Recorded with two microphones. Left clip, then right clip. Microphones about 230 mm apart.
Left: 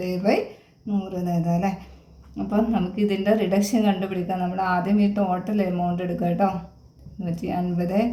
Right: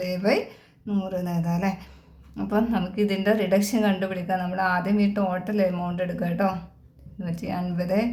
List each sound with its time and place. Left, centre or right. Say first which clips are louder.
0.0 s speech: left 1 dB; right
2.5 s speech: left 1 dB; right